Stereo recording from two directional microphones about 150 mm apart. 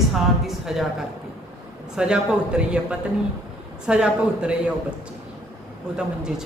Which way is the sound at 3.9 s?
5° right (ahead or behind).